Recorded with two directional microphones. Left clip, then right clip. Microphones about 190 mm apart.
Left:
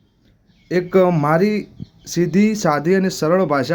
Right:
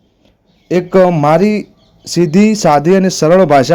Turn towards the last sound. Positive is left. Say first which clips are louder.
# right 9 dB
turn(degrees=-30)  # may be behind; listen again after turning